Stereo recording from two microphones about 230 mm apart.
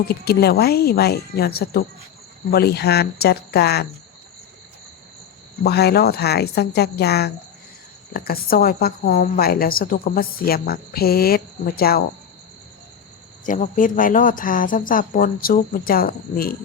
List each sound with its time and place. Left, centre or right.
0.1 s speech: left
5.6 s a woman's voice: left
13.4 s a woman's voice: left